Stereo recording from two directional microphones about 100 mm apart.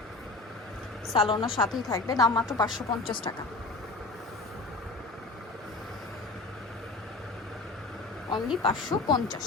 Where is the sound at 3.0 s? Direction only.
60° left (ahead or behind).